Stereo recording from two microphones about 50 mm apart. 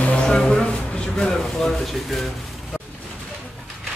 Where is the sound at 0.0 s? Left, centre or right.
Left.